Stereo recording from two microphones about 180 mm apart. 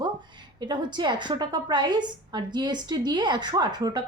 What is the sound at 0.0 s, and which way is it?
A woman's voice, 25° right (ahead or behind).